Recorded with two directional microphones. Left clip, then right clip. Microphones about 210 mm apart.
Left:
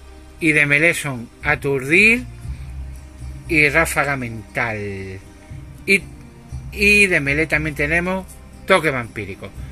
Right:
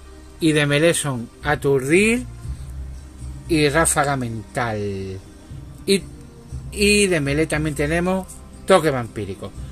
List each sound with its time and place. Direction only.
0.7 s speech: 20° right (ahead or behind)
3.4 s speech: 20° right (ahead or behind)
6.7 s speech: 20° right (ahead or behind)